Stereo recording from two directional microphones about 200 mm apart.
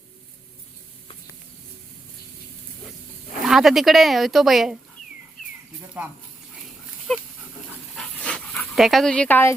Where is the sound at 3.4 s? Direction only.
Centre (ahead or behind).